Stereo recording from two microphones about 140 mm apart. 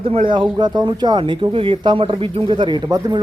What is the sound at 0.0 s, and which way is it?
A man's voice, 40° right (ahead or behind).